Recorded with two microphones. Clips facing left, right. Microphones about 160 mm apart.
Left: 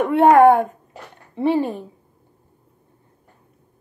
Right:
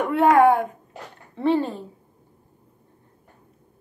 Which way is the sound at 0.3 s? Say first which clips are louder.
Left 4 dB; 45° left (ahead or behind).